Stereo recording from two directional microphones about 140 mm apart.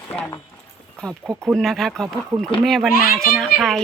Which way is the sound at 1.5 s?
Centre (ahead or behind).